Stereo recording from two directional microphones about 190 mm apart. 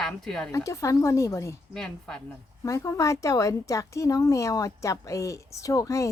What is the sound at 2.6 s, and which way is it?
Speech, 15° left (ahead or behind).